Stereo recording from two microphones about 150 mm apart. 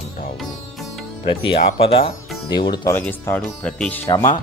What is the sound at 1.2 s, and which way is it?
Speech, 35° left (ahead or behind).